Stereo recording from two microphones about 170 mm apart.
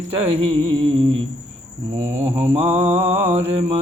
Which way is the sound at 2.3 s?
35° right (ahead or behind).